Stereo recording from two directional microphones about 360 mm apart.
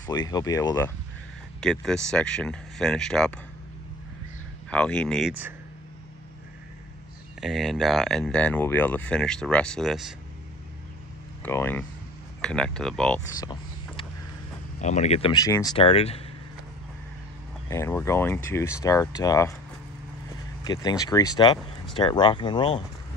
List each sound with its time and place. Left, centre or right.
0.3 s speech: centre
4.6 s speech: centre
7.3 s speech: centre
11.4 s speech: centre
17.6 s speech: centre
20.6 s speech: centre